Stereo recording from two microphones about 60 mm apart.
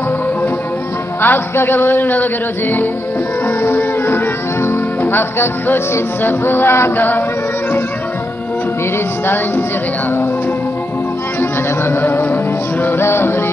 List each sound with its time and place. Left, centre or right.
1.2 s a man's voice: left
3.4 s music: left
6.2 s a man's voice: left
11.8 s music: left
12.8 s a man's voice: left